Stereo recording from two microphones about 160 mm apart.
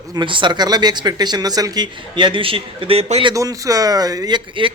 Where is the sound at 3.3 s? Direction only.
20° right (ahead or behind).